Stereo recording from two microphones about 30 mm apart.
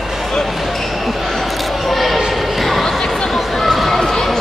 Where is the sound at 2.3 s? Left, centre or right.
Centre.